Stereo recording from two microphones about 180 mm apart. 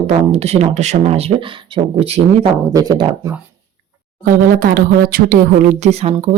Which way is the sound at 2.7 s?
20° right (ahead or behind).